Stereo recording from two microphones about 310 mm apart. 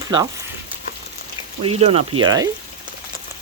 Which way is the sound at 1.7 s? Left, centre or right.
Centre.